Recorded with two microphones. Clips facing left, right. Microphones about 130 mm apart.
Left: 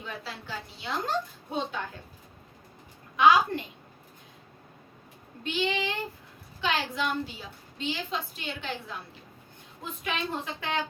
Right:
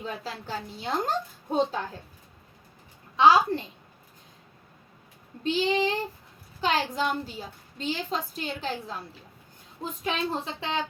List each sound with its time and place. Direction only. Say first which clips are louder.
0.0 s a woman's voice: right 4 dB; 40° right (ahead or behind)
3.2 s a woman's voice: right 2 dB; 30° right (ahead or behind)
5.4 s a woman's voice: right 5 dB; 35° right (ahead or behind)